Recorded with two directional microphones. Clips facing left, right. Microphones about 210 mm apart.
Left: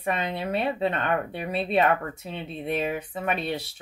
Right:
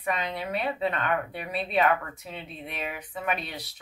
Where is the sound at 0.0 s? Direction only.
25° left (ahead or behind).